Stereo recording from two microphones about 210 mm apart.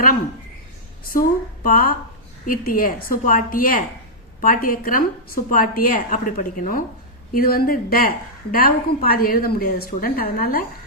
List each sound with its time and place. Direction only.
1.1 s a woman's voice: 40° left (ahead or behind)